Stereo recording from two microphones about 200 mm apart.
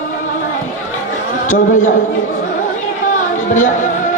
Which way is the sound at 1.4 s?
40° left (ahead or behind).